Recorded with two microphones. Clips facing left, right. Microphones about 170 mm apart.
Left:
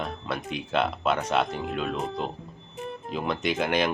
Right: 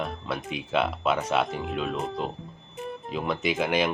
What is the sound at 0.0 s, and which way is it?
Speech, centre (ahead or behind).